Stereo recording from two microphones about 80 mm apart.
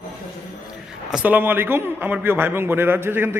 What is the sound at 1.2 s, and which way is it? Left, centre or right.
A man's voice, right.